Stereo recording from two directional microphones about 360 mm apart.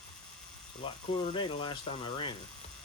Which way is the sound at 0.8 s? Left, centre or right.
Centre.